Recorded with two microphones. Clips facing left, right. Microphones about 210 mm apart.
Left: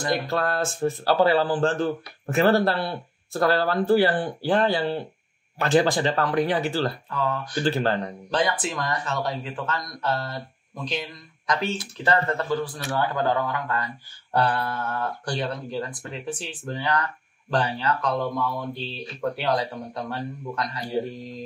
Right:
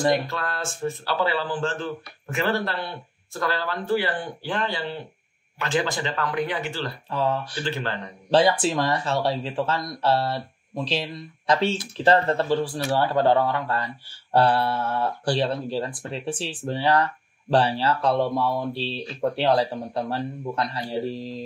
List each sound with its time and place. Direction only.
0.3 s speech: 40° left (ahead or behind)
7.1 s speech: 30° right (ahead or behind)
7.6 s speech: 40° left (ahead or behind)
8.3 s a man's voice: 30° right (ahead or behind)